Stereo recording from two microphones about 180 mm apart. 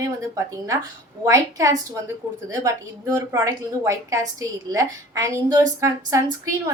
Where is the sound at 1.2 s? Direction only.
15° right (ahead or behind).